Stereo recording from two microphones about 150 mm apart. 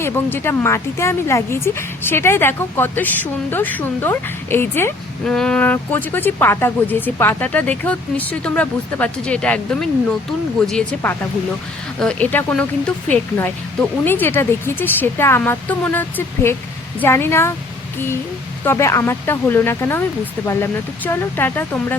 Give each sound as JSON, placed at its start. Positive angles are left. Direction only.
{"t": 0.0, "sound": "speech", "side_deg": 15}
{"t": 18.6, "sound": "speech", "side_deg": 15}